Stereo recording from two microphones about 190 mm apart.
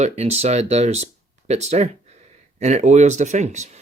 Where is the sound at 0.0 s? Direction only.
35° right (ahead or behind).